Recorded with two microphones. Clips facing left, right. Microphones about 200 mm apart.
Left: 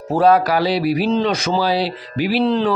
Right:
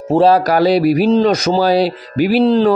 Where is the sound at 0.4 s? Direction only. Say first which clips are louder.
Right 6 dB; 45° right (ahead or behind).